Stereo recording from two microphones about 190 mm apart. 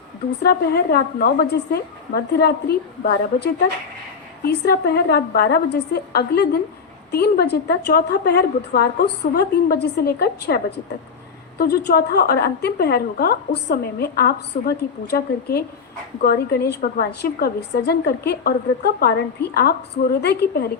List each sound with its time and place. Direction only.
0.4 s a woman's voice: 55° left (ahead or behind)